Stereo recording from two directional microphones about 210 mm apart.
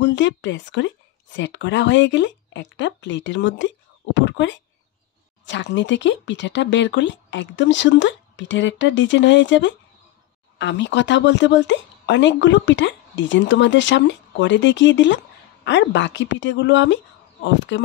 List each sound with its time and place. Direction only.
0.0 s speech: 55° left (ahead or behind)